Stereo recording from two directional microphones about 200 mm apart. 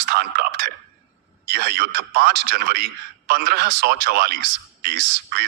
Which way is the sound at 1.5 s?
50° right (ahead or behind).